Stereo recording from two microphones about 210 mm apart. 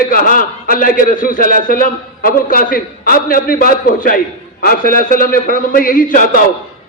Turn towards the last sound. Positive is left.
turn(degrees=40)  # may be behind; listen again after turning